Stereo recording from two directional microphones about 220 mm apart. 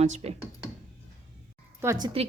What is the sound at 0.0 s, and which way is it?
Speech, 30° right (ahead or behind).